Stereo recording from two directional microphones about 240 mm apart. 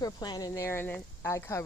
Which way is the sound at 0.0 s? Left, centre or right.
Centre.